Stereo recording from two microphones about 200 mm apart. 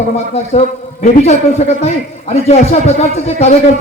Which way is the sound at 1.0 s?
35° left (ahead or behind).